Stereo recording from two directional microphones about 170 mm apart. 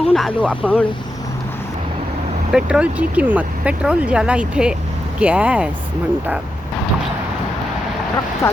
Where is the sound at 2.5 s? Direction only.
5° right (ahead or behind).